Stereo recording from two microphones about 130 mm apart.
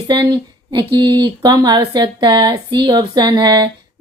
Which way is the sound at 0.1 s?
35° right (ahead or behind).